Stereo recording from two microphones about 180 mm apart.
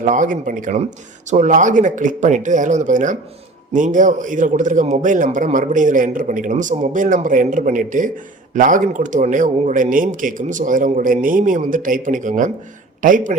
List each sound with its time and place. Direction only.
0.0 s a man's voice: 45° right (ahead or behind)